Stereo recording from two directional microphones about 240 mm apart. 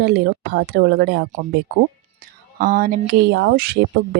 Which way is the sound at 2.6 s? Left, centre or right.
Right.